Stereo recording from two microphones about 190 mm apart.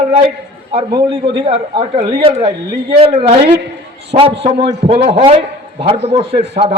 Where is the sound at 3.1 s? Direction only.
55° right (ahead or behind).